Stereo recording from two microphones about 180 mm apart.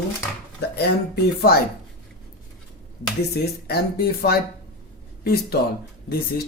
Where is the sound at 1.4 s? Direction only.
60° left (ahead or behind).